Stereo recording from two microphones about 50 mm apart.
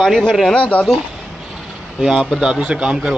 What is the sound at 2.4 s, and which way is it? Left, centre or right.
Speech, centre.